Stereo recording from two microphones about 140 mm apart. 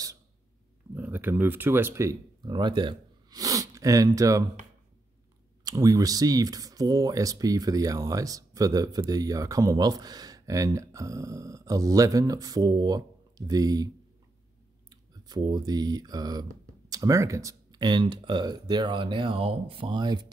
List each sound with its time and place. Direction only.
0.9 s speech: 15° right (ahead or behind)
2.5 s speech: 35° right (ahead or behind)
5.6 s speech: 25° right (ahead or behind)
14.9 s speech: 30° right (ahead or behind)